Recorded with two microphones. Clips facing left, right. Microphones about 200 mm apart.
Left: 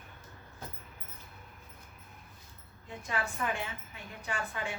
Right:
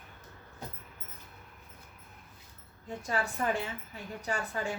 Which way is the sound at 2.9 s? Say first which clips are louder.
Right 3 dB; 40° right (ahead or behind).